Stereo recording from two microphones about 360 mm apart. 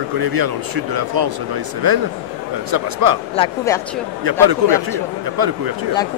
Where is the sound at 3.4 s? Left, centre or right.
Centre.